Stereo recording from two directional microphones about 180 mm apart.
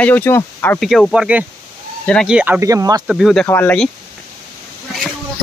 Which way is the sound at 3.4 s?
10° left (ahead or behind).